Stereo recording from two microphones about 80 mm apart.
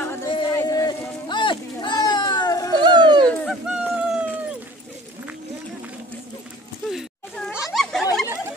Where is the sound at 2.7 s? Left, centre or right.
Right.